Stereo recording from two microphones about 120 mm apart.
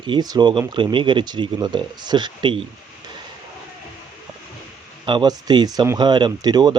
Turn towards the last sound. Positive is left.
turn(degrees=-35)  # may be behind; listen again after turning